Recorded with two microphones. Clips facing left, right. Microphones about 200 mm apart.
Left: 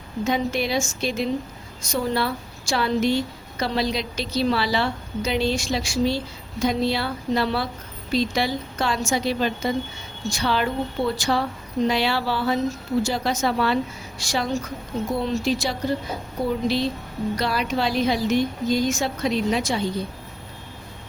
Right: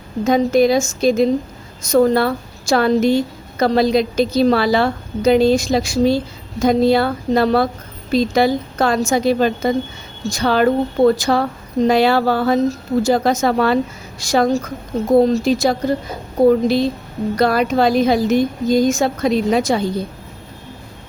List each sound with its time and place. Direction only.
0.3 s a woman's voice: 45° right (ahead or behind)